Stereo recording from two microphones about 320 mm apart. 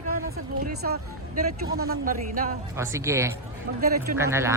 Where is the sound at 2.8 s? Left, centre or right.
Centre.